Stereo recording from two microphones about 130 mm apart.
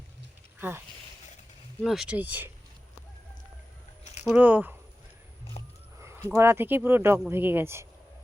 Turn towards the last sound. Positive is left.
turn(degrees=-15)  # may be behind; listen again after turning